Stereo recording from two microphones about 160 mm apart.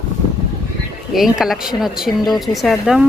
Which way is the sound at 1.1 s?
Centre (ahead or behind).